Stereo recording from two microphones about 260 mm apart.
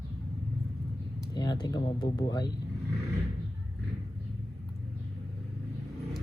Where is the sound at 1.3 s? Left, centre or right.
Centre.